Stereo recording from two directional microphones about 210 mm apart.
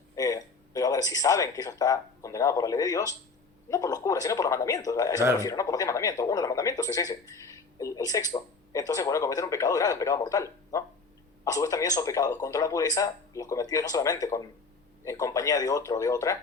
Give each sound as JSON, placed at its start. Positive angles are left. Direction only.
{"t": 0.2, "sound": "speech", "side_deg": 15}